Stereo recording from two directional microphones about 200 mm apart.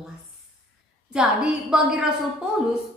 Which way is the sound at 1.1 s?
5° right (ahead or behind).